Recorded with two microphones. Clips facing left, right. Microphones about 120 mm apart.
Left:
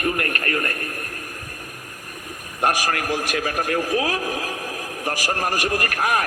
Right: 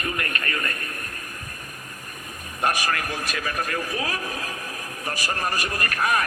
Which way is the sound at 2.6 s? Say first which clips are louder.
Left 3 dB; 70° left (ahead or behind).